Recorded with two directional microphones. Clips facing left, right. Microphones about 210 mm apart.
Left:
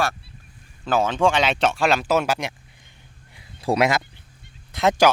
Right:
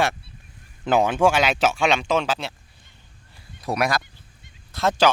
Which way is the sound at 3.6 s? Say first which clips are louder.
Left 4 dB; 25° left (ahead or behind).